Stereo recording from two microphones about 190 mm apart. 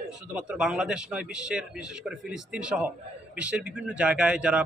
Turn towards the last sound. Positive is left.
turn(degrees=-5)  # may be behind; listen again after turning